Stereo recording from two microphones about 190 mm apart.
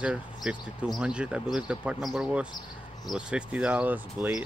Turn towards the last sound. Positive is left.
turn(degrees=-10)  # may be behind; listen again after turning